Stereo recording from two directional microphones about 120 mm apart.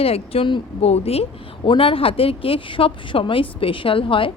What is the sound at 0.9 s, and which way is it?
A woman's voice, 60° left (ahead or behind).